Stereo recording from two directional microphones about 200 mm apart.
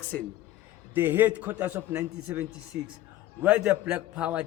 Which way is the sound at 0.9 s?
10° right (ahead or behind).